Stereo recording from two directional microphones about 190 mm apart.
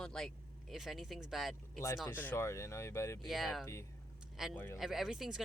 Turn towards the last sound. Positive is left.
turn(degrees=0)  # may be behind; listen again after turning